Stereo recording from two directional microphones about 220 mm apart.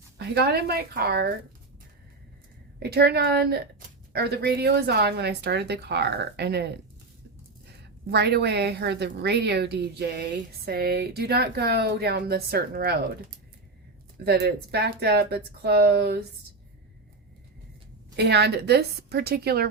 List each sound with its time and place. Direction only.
0.2 s a woman's voice: 45° right (ahead or behind)
2.7 s a woman's voice: 45° right (ahead or behind)
8.0 s a woman's voice: 50° right (ahead or behind)
14.3 s a woman's voice: 45° right (ahead or behind)
18.2 s a woman's voice: 50° right (ahead or behind)